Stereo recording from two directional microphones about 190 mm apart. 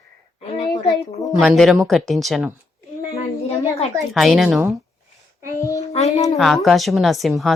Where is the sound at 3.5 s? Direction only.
35° left (ahead or behind).